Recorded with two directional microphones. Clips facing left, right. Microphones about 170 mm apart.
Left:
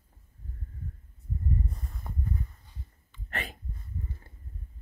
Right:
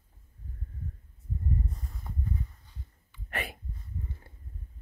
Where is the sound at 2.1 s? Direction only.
55° left (ahead or behind).